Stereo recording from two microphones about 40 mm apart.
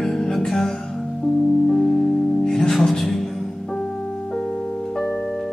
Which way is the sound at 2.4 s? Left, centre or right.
Centre.